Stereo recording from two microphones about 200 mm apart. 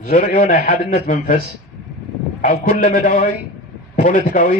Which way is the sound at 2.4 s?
40° left (ahead or behind).